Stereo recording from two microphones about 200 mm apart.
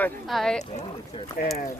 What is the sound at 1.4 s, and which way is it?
Speech, 50° left (ahead or behind).